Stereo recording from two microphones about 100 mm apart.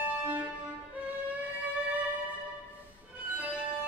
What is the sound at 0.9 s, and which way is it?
Violin, 15° right (ahead or behind).